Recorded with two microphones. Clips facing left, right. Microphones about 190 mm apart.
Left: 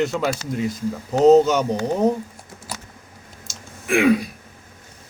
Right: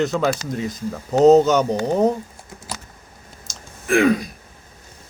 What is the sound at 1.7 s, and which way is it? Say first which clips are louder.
Speech: right 1 dB; 35° right (ahead or behind).